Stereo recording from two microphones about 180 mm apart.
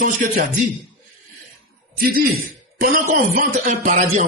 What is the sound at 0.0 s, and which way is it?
Speech, 50° right (ahead or behind).